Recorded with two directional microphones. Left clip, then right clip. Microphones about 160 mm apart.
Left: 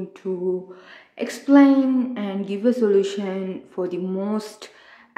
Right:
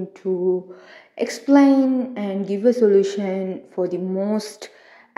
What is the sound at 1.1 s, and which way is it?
A woman's voice, 20° right (ahead or behind).